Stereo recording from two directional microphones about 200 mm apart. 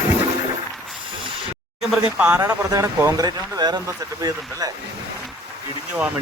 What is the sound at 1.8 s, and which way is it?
Speech, 5° right (ahead or behind).